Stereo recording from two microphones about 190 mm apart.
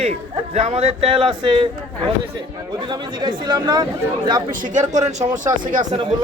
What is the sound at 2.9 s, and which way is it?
Speech, 20° right (ahead or behind).